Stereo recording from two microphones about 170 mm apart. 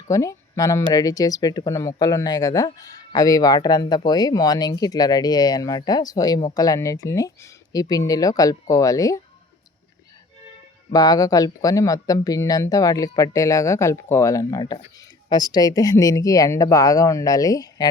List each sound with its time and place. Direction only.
0.1 s speech: 20° left (ahead or behind)
10.9 s speech: 20° left (ahead or behind)